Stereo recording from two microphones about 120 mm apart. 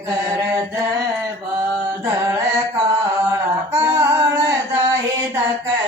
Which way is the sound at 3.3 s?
25° right (ahead or behind).